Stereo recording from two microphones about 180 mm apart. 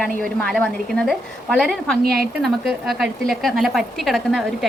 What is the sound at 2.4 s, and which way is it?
Speech, centre (ahead or behind).